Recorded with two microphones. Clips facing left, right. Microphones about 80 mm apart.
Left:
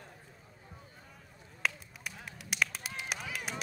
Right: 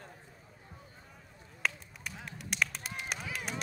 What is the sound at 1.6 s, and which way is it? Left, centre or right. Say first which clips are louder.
Honk: even; centre.